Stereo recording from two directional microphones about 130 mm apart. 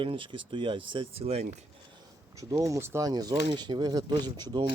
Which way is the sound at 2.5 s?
25° right (ahead or behind).